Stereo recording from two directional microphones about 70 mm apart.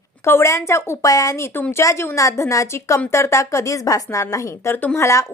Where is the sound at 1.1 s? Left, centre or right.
Left.